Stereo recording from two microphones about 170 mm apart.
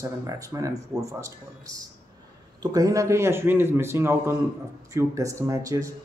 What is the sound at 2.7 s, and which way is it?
Speech, 20° right (ahead or behind).